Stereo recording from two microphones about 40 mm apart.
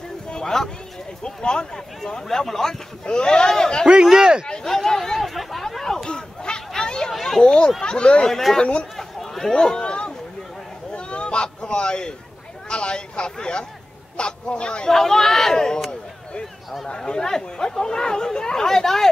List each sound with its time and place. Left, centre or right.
0.3 s a sound: centre
1.2 s speech: left
2.2 s speech: centre
3.1 s speech: left
3.8 s speech: centre
4.6 s speech: centre
5.3 s chatter: centre
6.0 s a sound: left
7.8 s speech: left
8.3 s speech: centre
8.9 s a sound: centre
12.6 s a man's voice: left
14.9 s speech: centre
16.8 s speech: left